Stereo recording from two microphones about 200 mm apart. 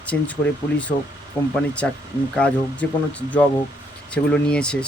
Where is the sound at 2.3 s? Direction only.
5° left (ahead or behind).